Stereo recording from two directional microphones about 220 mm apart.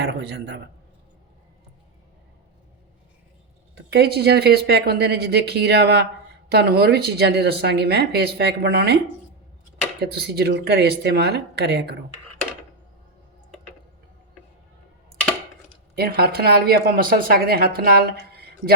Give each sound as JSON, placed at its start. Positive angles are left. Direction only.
{"t": 0.0, "sound": "speech", "side_deg": -50}
{"t": 3.8, "sound": "speech", "side_deg": -50}
{"t": 10.0, "sound": "speech", "side_deg": -45}
{"t": 16.0, "sound": "speech", "side_deg": -45}